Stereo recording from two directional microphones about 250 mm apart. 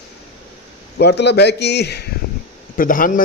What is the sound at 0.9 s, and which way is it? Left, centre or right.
A man's voice, left.